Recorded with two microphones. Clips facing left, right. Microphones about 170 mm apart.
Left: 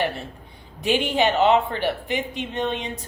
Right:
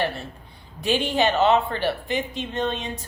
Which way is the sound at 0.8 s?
20° left (ahead or behind).